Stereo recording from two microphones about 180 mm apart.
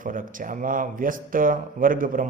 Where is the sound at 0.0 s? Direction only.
50° right (ahead or behind).